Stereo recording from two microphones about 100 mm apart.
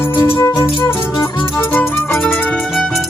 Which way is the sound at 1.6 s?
20° left (ahead or behind).